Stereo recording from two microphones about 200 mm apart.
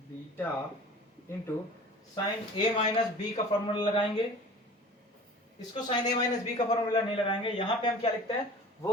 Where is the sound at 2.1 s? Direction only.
20° left (ahead or behind).